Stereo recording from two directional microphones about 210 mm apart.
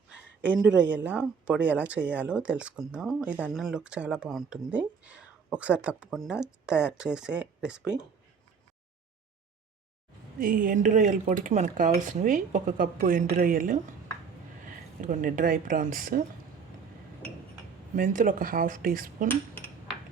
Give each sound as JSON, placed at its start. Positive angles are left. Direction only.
{"t": 0.4, "sound": "speech", "side_deg": -5}
{"t": 10.3, "sound": "speech", "side_deg": -40}
{"t": 15.0, "sound": "speech", "side_deg": -40}
{"t": 17.9, "sound": "speech", "side_deg": -40}